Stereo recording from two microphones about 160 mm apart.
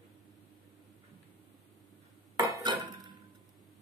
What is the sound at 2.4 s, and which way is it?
Dishes, 25° right (ahead or behind).